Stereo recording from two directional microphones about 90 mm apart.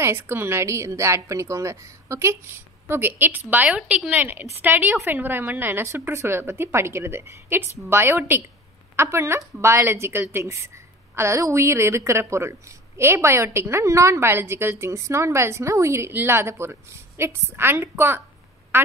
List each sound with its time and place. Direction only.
0.0 s a woman's voice: 25° right (ahead or behind)
18.7 s quack: 25° right (ahead or behind)